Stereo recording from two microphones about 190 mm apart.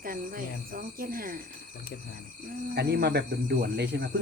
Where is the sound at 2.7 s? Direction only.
60° right (ahead or behind).